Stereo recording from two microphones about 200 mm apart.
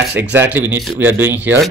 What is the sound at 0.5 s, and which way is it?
Speech, 10° right (ahead or behind).